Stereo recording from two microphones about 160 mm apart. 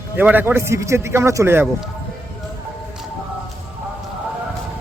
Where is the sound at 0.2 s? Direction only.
10° right (ahead or behind).